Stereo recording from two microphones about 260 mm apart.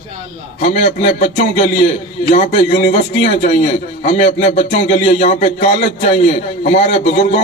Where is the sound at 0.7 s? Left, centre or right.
Left.